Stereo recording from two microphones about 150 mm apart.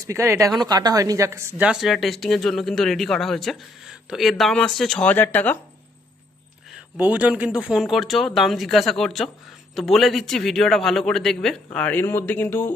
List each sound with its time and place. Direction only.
0.1 s speech: 20° right (ahead or behind)
1.6 s speech: centre (ahead or behind)
6.9 s a man's voice: 10° right (ahead or behind); by 12.7 s 15° left (ahead or behind)